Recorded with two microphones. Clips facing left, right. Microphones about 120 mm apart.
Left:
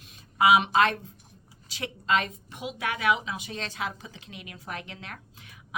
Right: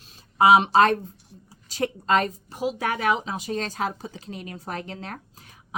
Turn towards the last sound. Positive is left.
turn(degrees=-40)  # may be behind; listen again after turning